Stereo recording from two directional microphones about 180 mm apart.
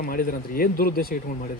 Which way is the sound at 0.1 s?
55° left (ahead or behind).